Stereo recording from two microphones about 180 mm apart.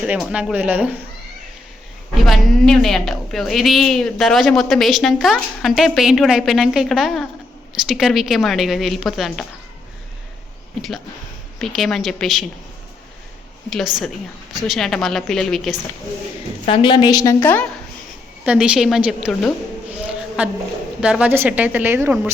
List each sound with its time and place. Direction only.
0.0 s a woman's voice: 5° right (ahead or behind)
2.1 s a woman's voice: centre (ahead or behind)
10.8 s a woman's voice: centre (ahead or behind)
13.7 s a woman's voice: centre (ahead or behind)
16.6 s a woman's voice: 25° left (ahead or behind); by 17.7 s 10° left (ahead or behind)
18.4 s a woman's voice: 5° right (ahead or behind)
19.9 s a sound: 5° right (ahead or behind)
21.0 s a woman's voice: 5° right (ahead or behind)